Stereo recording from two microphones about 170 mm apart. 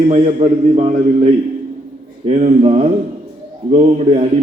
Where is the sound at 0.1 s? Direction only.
40° right (ahead or behind).